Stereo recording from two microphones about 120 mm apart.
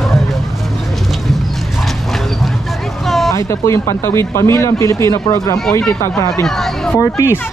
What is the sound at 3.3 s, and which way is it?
Speech, 25° left (ahead or behind).